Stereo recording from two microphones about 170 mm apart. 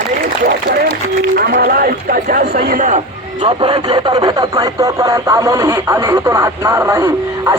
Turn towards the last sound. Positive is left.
turn(degrees=-15)  # may be behind; listen again after turning